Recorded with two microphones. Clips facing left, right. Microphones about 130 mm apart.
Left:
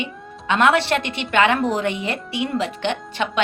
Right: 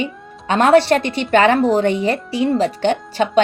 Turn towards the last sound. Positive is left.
turn(degrees=-35)  # may be behind; listen again after turning